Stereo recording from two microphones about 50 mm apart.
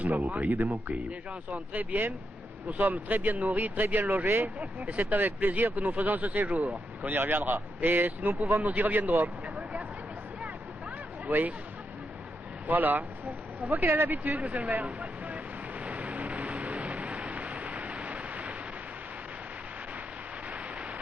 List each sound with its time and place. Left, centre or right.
0.0 s speech: right
4.6 s speech: right
7.2 s speech: right
7.8 s speech: right
11.3 s speech: right
12.6 s speech: right
14.3 s speech: right
14.8 s vehicle: right
20.5 s a sound: right